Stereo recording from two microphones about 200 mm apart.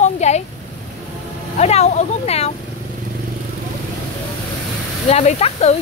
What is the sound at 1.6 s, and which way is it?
Speech, 30° left (ahead or behind).